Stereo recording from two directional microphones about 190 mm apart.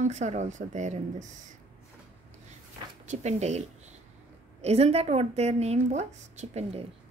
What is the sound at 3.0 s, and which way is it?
A woman's voice, 35° right (ahead or behind).